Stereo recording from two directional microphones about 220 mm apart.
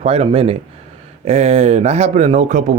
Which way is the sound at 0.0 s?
25° right (ahead or behind).